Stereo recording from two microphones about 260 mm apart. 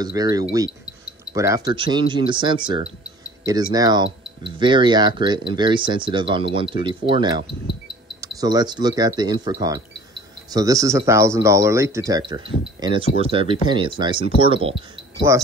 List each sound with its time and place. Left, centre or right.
0.0 s speech: centre